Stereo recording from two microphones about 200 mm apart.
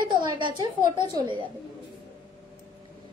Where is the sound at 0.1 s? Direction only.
25° right (ahead or behind).